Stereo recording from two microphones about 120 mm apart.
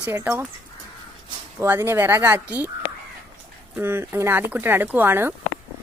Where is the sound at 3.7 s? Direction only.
20° right (ahead or behind).